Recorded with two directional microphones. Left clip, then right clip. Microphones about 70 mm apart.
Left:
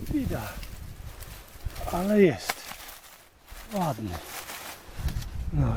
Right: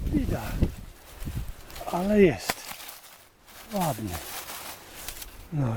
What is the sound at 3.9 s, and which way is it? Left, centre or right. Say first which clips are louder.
Speech: right 1 dB; right.